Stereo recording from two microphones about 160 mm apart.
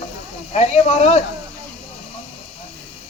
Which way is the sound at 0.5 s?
40° left (ahead or behind).